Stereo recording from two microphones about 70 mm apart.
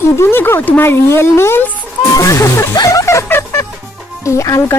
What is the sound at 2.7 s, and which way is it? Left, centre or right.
Music, left.